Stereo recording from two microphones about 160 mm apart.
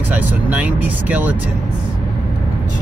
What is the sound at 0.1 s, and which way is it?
Speech, 10° right (ahead or behind).